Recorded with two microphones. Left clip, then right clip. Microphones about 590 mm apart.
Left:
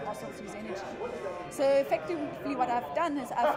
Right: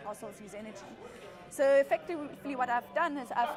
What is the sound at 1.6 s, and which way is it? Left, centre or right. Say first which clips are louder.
A woman's voice: even; right.